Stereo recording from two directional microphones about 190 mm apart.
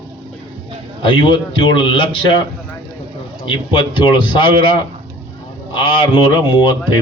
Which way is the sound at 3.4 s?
25° left (ahead or behind).